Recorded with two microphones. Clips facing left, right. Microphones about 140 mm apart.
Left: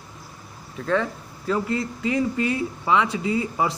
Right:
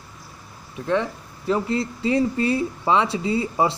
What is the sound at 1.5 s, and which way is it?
Speech, 30° right (ahead or behind).